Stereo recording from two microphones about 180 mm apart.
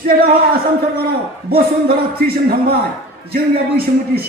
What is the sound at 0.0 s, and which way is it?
A man's voice, 55° right (ahead or behind).